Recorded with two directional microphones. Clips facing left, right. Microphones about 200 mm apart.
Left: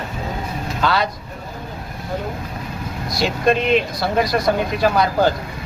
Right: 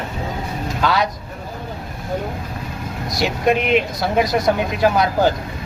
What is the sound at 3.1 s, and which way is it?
Speech, 15° right (ahead or behind).